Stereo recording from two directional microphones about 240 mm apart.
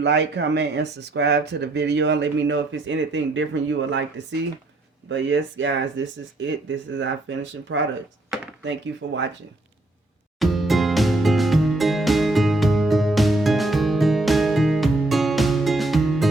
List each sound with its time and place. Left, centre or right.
0.0 s speech: right
5.0 s speech: right
9.0 s speech: right
10.4 s music: centre